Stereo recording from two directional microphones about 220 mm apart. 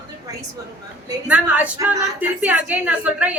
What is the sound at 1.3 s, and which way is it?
A woman's voice, 5° right (ahead or behind).